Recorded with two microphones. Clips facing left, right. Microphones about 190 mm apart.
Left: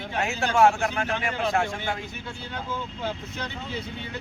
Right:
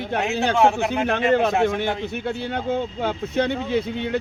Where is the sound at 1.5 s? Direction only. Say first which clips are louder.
Right 6 dB; 20° right (ahead or behind).